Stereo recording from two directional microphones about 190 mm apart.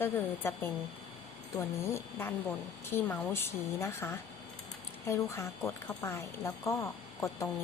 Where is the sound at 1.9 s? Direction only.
10° left (ahead or behind).